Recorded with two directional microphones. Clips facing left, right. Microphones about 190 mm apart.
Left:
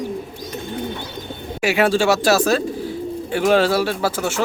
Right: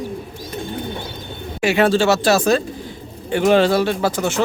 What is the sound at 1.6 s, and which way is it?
Speech, 10° left (ahead or behind).